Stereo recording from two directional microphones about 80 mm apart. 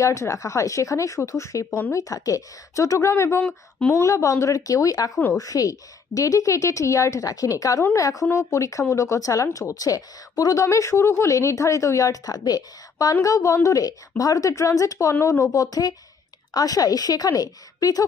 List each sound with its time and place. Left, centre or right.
0.0 s a woman's voice: left